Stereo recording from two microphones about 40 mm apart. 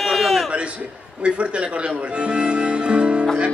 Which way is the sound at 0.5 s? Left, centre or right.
Right.